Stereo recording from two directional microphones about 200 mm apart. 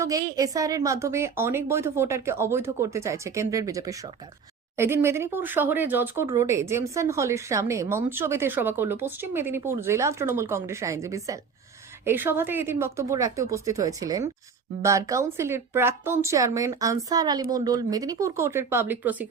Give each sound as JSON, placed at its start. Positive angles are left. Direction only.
{"t": 0.0, "sound": "speech", "side_deg": -15}